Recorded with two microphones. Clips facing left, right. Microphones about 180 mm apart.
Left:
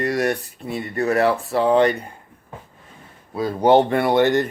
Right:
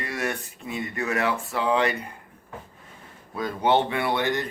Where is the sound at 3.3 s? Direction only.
35° left (ahead or behind).